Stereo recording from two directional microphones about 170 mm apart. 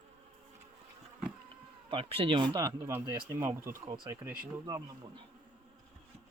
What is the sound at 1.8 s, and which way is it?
Speech, 30° right (ahead or behind).